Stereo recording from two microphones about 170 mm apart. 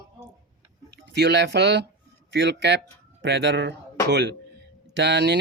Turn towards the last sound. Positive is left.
turn(degrees=-85)